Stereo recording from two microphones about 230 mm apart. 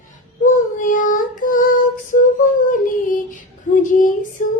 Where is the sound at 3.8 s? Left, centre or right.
Left.